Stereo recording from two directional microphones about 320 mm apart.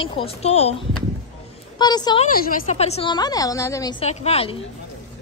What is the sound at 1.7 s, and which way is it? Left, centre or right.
A woman's voice, centre.